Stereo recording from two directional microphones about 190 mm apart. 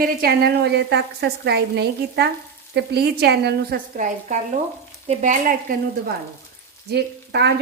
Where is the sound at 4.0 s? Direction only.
40° right (ahead or behind).